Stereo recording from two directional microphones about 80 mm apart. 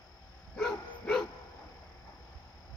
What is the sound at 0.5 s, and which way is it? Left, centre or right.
Dog, centre.